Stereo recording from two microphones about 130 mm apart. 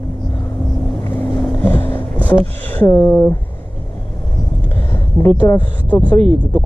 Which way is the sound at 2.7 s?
15° left (ahead or behind).